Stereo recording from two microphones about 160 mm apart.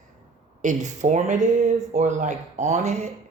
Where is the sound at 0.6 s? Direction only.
50° right (ahead or behind).